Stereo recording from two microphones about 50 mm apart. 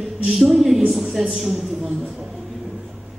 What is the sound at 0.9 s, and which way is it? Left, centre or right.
Speech, centre.